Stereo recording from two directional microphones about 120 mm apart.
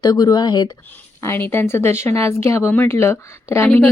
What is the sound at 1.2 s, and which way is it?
A woman's voice, 20° left (ahead or behind).